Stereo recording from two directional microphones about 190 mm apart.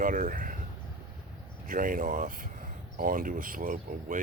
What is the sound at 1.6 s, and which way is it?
Speech, 45° right (ahead or behind).